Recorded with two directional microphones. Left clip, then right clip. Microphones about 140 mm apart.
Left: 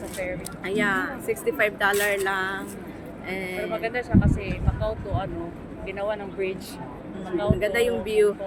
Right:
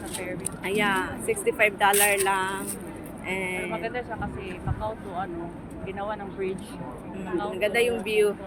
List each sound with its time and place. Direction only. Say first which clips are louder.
0.6 s speech: even; 5° left (ahead or behind)
3.8 s speech: left 5 dB; 30° left (ahead or behind)
7.6 s speech: right 2 dB; 15° left (ahead or behind)